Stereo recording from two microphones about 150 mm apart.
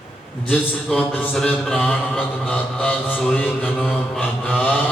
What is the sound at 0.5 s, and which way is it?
Mantra, 5° left (ahead or behind).